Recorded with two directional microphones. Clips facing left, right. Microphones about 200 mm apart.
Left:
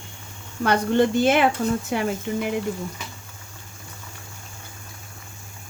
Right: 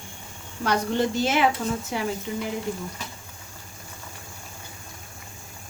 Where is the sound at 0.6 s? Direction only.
55° left (ahead or behind).